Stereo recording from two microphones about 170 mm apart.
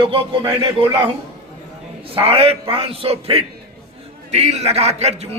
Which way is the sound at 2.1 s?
35° right (ahead or behind).